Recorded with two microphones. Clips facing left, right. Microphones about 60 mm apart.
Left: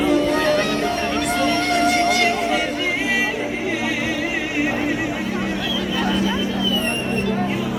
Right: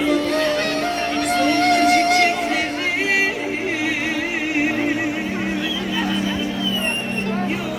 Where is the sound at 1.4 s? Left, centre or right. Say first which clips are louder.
Right 3 dB; right.